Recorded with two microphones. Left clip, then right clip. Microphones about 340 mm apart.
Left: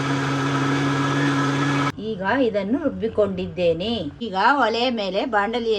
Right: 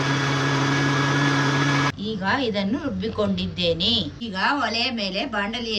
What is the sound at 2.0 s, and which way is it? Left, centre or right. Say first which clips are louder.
Music: left 2 dB; centre.